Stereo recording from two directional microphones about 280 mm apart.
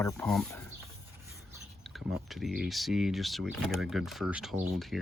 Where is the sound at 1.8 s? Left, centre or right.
Centre.